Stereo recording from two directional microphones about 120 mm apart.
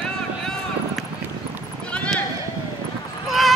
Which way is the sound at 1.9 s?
10° left (ahead or behind).